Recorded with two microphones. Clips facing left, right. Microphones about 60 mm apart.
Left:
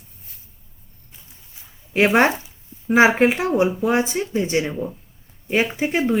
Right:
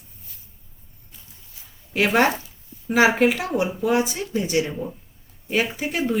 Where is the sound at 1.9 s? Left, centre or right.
Left.